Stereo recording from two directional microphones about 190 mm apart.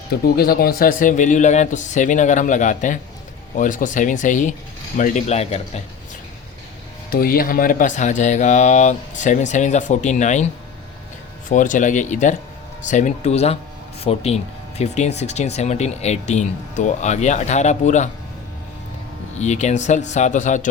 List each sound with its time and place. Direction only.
0.3 s speech: 55° left (ahead or behind); by 5.8 s 35° left (ahead or behind)
7.1 s speech: 50° left (ahead or behind)
11.4 s speech: 45° left (ahead or behind)
19.4 s speech: 35° left (ahead or behind)